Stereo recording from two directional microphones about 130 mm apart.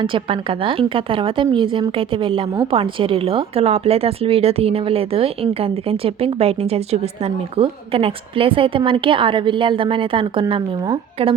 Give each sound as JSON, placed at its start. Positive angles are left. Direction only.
{"t": 0.0, "sound": "a woman's voice", "side_deg": -40}